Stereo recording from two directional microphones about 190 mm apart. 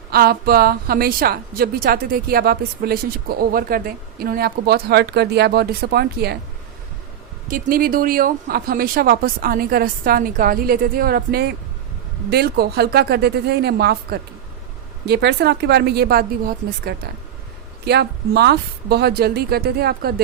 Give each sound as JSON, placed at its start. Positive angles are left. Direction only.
{"t": 0.1, "sound": "a woman's voice", "side_deg": -55}
{"t": 7.4, "sound": "a woman's voice", "side_deg": -50}
{"t": 17.8, "sound": "speech", "side_deg": -60}